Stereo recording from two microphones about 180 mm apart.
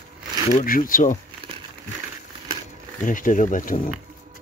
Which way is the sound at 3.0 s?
45° left (ahead or behind).